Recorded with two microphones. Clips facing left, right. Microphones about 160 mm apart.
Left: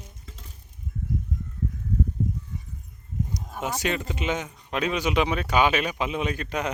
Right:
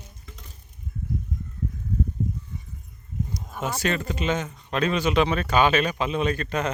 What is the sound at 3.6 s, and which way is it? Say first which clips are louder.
Speech: right 2 dB; 15° left (ahead or behind).